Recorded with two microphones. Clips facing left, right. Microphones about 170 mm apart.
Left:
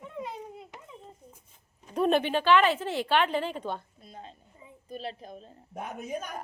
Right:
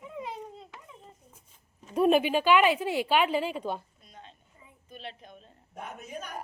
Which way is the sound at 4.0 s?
30° left (ahead or behind).